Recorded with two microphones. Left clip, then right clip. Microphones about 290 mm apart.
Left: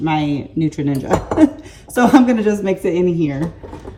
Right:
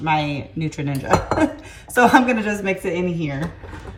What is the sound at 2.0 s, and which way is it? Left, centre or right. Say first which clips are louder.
Speech: left 1 dB; right.